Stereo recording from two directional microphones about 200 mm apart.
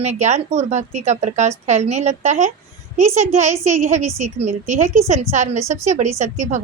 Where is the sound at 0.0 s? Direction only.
35° right (ahead or behind).